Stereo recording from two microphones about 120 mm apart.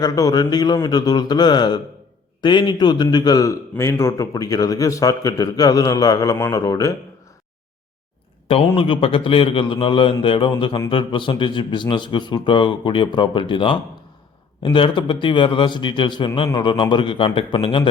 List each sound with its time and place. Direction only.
0.0 s a man's voice: 30° left (ahead or behind)
8.4 s a man's voice: 50° left (ahead or behind)